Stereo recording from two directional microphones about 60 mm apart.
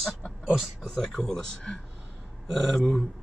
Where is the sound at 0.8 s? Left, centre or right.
Centre.